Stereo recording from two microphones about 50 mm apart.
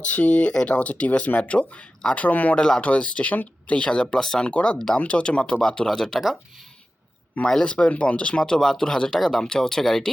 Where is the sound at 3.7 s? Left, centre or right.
Centre.